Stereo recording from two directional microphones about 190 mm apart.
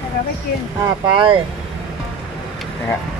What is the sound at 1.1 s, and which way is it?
Speech, 25° right (ahead or behind).